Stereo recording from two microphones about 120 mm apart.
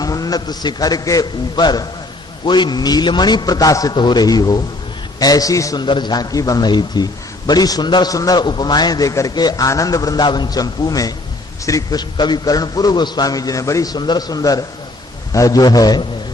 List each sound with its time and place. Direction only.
0.0 s a man's voice: 30° left (ahead or behind)
5.8 s a man's voice: 40° left (ahead or behind)